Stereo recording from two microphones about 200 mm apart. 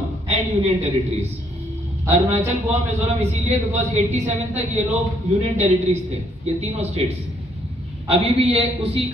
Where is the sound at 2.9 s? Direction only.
30° right (ahead or behind).